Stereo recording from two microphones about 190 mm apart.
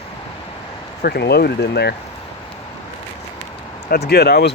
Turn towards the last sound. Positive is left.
turn(degrees=60)  # may be behind; listen again after turning